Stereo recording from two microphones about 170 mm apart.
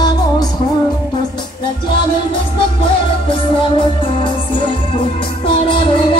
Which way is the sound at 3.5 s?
30° left (ahead or behind).